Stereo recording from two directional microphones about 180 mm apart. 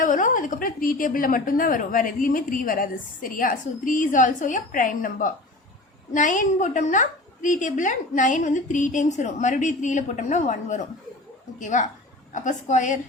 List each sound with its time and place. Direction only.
0.0 s a woman's voice: 45° left (ahead or behind)